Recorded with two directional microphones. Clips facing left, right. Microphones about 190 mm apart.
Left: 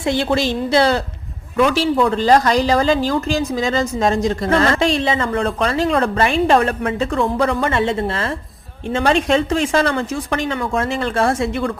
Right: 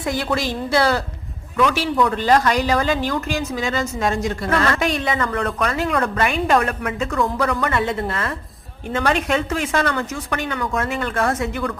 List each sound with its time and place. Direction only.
0.0 s a woman's voice: 25° left (ahead or behind)